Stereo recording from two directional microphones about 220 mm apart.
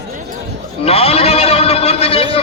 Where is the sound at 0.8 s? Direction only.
25° left (ahead or behind).